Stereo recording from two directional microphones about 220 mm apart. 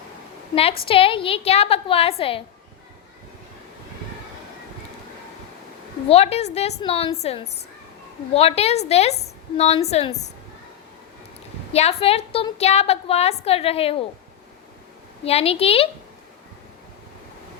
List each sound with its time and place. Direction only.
0.9 s a woman's voice: 25° left (ahead or behind)
6.1 s a woman's voice: 30° left (ahead or behind)
11.7 s a woman's voice: 30° left (ahead or behind)
15.2 s a woman's voice: 25° left (ahead or behind)